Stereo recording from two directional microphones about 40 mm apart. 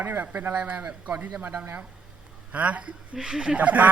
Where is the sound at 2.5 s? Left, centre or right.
Right.